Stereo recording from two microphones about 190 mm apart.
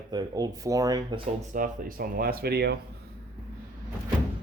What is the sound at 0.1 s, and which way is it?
Speech, 20° right (ahead or behind).